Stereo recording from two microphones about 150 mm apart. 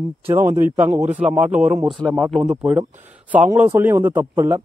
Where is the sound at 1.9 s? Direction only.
5° left (ahead or behind); by 4.6 s 15° right (ahead or behind).